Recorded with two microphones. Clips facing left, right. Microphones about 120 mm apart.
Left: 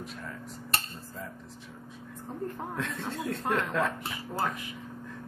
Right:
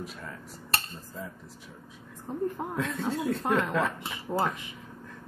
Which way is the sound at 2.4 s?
5° right (ahead or behind).